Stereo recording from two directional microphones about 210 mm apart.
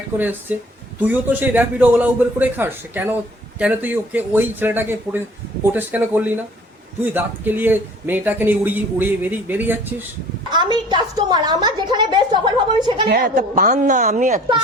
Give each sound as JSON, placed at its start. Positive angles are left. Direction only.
{"t": 0.2, "sound": "speech", "side_deg": -10}
{"t": 10.5, "sound": "a woman's voice", "side_deg": -20}
{"t": 13.1, "sound": "a woman's voice", "side_deg": -40}